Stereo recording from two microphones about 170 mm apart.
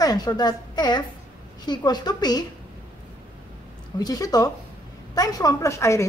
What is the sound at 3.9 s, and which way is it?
A woman's voice, 20° left (ahead or behind).